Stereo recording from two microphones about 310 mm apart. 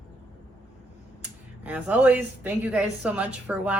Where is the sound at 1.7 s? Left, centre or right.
Centre.